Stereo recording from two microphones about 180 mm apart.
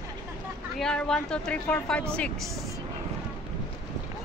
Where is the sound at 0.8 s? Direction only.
5° left (ahead or behind).